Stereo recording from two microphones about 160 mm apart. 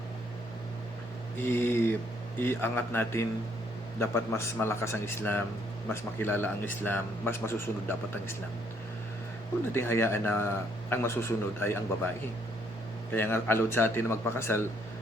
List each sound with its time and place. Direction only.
1.4 s a man's voice: 15° left (ahead or behind)
9.7 s a man's voice: 15° left (ahead or behind)
13.1 s a man's voice: 15° left (ahead or behind)